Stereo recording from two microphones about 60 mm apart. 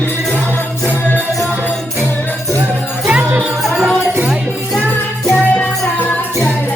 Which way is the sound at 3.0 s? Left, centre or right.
Centre.